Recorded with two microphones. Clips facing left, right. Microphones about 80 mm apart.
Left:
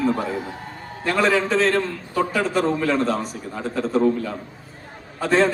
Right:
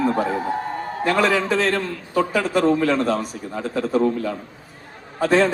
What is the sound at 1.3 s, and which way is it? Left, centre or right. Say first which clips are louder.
A man's voice: left 1 dB; left.